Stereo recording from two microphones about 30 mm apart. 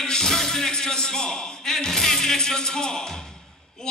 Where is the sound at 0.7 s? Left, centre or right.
Left.